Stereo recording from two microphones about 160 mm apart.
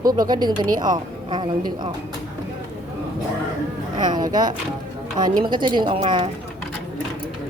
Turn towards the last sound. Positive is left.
turn(degrees=-30)  # may be behind; listen again after turning